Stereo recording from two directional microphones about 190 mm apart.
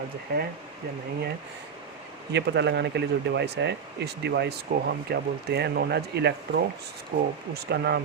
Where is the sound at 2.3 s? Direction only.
65° right (ahead or behind).